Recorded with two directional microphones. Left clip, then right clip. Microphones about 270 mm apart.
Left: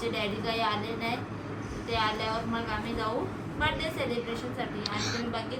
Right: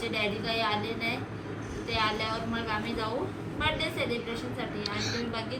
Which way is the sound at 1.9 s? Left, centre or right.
Centre.